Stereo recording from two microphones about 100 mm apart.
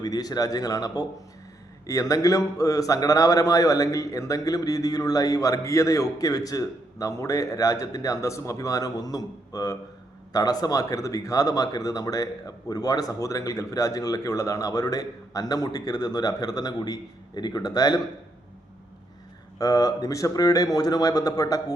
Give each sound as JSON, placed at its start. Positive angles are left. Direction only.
{"t": 0.0, "sound": "a man's voice", "side_deg": 40}
{"t": 19.5, "sound": "a man's voice", "side_deg": 40}